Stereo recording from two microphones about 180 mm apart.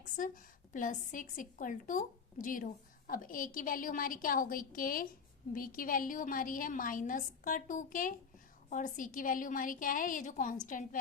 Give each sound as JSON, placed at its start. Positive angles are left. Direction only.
{"t": 0.7, "sound": "a woman's voice", "side_deg": 45}